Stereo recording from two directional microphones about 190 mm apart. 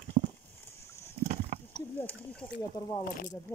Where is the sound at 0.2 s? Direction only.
40° right (ahead or behind).